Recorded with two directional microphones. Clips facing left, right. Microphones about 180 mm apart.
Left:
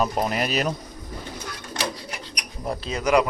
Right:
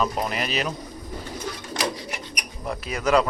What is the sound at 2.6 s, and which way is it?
Speech, 30° left (ahead or behind).